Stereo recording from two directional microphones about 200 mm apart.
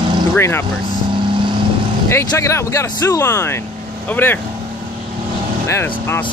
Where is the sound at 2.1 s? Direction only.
15° left (ahead or behind).